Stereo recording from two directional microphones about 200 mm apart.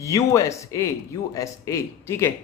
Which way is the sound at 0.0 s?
15° left (ahead or behind).